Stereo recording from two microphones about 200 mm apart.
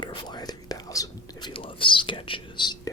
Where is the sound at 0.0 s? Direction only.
20° left (ahead or behind).